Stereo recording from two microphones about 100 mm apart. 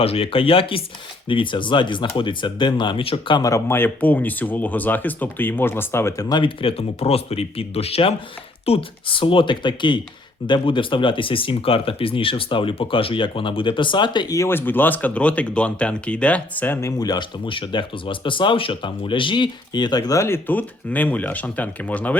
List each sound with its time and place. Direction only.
0.0 s speech: 70° left (ahead or behind)
1.3 s speech: 55° left (ahead or behind)
3.3 s speech: 35° left (ahead or behind)
3.7 s speech: 20° left (ahead or behind)
6.2 s speech: 50° left (ahead or behind); by 8.1 s 85° left
8.6 s speech: 70° left (ahead or behind); by 14.3 s 50° left (ahead or behind)
14.3 s speech: 25° left (ahead or behind)
16.8 s speech: 40° left (ahead or behind)
20.1 s speech: 25° left (ahead or behind)